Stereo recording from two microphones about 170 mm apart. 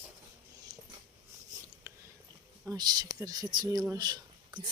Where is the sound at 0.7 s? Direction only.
20° right (ahead or behind).